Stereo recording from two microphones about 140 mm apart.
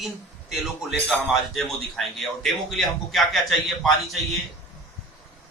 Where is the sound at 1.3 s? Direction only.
Centre (ahead or behind).